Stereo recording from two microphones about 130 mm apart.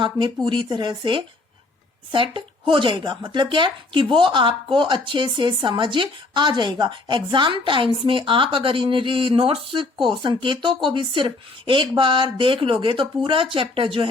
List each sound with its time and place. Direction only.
0.4 s speech: 40° right (ahead or behind)